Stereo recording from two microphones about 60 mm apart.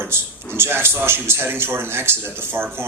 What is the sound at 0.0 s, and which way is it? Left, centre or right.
A man's voice, right.